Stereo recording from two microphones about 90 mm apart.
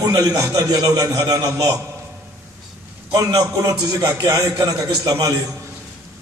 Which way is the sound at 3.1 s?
45° right (ahead or behind).